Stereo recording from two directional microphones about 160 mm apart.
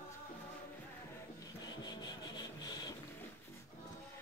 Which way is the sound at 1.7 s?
25° left (ahead or behind).